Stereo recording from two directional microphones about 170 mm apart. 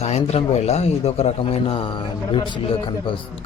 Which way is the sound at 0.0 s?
40° left (ahead or behind).